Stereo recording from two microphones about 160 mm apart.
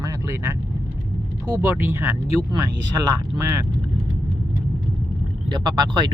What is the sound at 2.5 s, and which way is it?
Speech, 25° right (ahead or behind).